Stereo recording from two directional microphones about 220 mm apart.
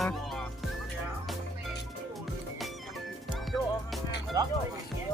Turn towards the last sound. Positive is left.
turn(degrees=-15)  # may be behind; listen again after turning